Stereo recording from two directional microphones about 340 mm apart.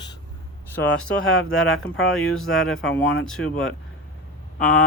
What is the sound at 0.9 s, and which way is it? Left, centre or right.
Speech, left.